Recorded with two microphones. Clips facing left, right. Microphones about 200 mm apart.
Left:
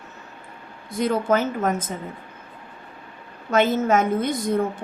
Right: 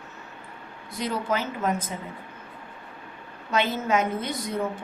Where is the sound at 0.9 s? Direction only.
50° left (ahead or behind).